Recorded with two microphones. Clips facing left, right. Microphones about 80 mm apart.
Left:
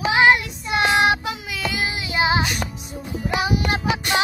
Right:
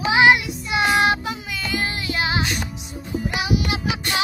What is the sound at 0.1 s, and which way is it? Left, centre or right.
Child singing, centre.